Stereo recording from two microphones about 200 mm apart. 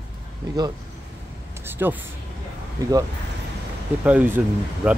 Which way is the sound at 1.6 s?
10° right (ahead or behind).